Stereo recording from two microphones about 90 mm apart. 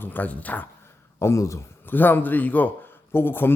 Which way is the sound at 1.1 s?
35° left (ahead or behind).